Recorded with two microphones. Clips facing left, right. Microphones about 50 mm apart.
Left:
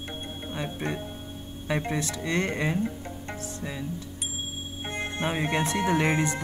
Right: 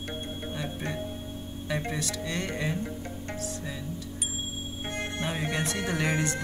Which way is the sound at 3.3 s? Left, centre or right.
Centre.